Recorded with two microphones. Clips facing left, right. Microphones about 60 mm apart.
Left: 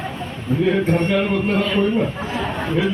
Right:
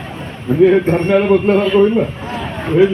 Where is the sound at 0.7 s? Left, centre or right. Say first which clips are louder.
Right 6 dB; right.